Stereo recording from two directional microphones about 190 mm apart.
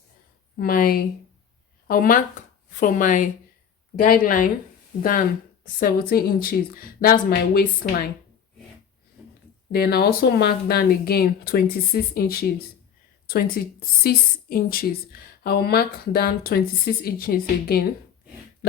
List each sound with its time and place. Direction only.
0.5 s speech: 50° left (ahead or behind)
5.6 s speech: 50° left (ahead or behind)
9.7 s speech: 55° left (ahead or behind)